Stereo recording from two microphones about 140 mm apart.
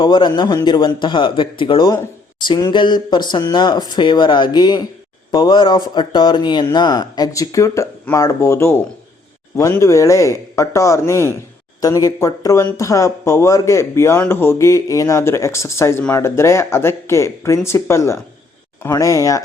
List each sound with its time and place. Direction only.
0.0 s speech: 35° left (ahead or behind)